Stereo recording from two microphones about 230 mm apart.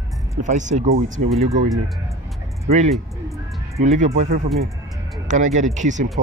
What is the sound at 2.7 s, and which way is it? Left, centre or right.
Speech, right.